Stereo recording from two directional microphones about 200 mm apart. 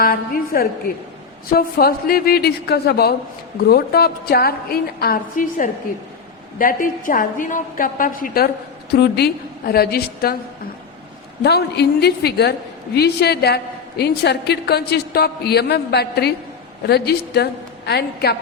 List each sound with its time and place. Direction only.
0.0 s a woman's voice: 50° left (ahead or behind)
11.4 s a woman's voice: 55° left (ahead or behind)